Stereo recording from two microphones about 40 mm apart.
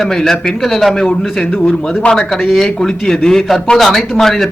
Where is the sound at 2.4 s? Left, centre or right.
Centre.